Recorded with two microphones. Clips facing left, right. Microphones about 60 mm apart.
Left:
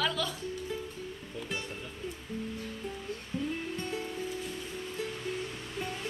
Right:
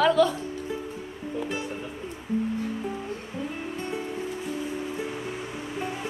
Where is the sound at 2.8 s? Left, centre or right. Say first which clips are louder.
Right 6 dB; centre.